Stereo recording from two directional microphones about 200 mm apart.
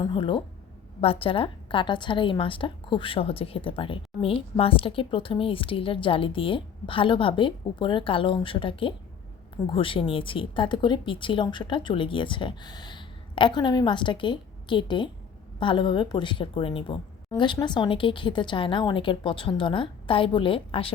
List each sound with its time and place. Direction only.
0.0 s a woman's voice: 25° left (ahead or behind)